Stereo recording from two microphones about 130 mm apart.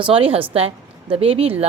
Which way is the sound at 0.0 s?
45° right (ahead or behind).